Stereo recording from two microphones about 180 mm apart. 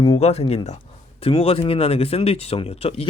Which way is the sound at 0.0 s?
30° left (ahead or behind).